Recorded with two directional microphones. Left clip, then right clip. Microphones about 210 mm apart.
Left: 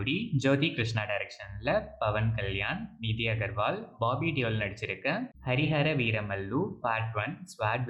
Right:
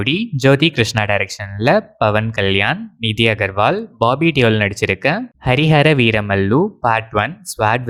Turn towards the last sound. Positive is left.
turn(degrees=-50)  # may be behind; listen again after turning